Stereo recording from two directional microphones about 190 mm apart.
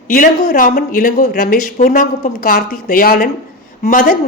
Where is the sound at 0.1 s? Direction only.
45° left (ahead or behind).